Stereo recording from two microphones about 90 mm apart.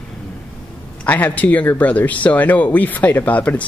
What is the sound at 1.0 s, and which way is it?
Speech, 20° left (ahead or behind).